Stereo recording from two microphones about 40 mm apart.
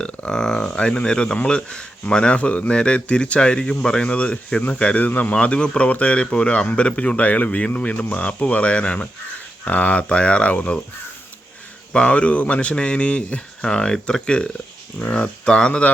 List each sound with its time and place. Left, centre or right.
0.3 s speech: centre
0.8 s speech: left
4.9 s speech: left
5.3 s speech: left
11.9 s speech: left